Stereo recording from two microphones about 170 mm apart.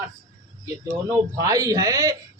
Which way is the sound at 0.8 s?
20° right (ahead or behind).